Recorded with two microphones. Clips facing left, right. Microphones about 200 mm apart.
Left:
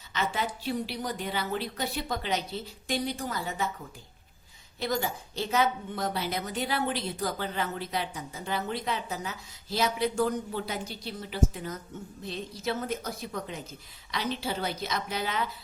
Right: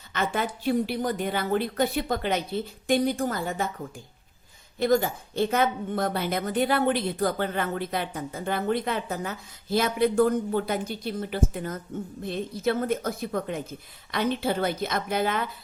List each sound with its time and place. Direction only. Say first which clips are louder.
0.1 s a woman's voice: right 3 dB; 50° right (ahead or behind)
4.8 s a woman's voice: right 8 dB; 55° right (ahead or behind)